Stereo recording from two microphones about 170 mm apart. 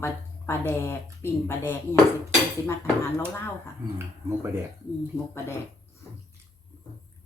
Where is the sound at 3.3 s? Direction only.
15° left (ahead or behind).